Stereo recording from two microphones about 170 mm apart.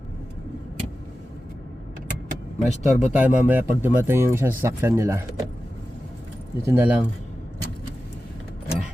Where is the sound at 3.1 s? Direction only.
10° right (ahead or behind).